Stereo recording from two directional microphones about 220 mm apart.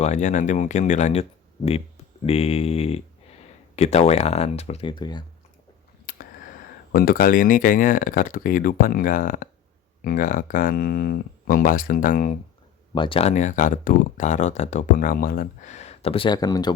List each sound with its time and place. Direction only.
0.0 s speech: 30° left (ahead or behind)
6.1 s a sound: 40° left (ahead or behind)
6.9 s speech: 40° left (ahead or behind)
12.9 s speech: 25° left (ahead or behind)